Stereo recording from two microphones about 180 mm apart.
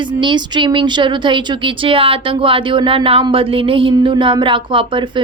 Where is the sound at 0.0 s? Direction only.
25° right (ahead or behind).